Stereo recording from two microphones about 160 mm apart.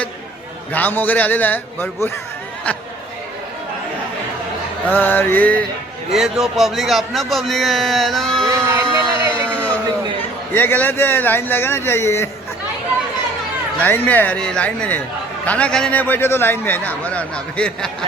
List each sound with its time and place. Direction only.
0.7 s a man's voice: 10° left (ahead or behind)
4.9 s a man's voice: 10° left (ahead or behind)
6.1 s a man's voice: 5° right (ahead or behind)
8.4 s a sound: 15° right (ahead or behind)
9.3 s a sound: 10° left (ahead or behind)
10.5 s a man's voice: 10° left (ahead or behind)
13.8 s a man's voice: 10° left (ahead or behind)